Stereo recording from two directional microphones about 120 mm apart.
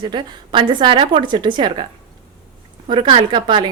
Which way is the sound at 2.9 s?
45° right (ahead or behind).